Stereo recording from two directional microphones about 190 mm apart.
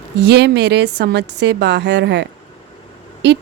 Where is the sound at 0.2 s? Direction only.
60° right (ahead or behind).